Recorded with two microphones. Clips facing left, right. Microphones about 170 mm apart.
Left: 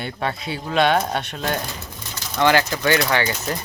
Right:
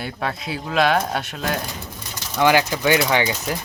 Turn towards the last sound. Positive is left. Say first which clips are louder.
# right 1 dB
turn(degrees=-15)  # may be behind; listen again after turning